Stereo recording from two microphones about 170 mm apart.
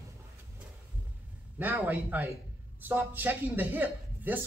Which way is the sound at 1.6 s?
10° right (ahead or behind).